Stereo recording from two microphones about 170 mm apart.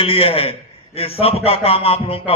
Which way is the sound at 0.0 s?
35° left (ahead or behind).